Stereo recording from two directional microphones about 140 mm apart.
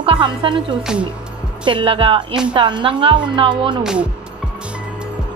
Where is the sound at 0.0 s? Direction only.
35° right (ahead or behind).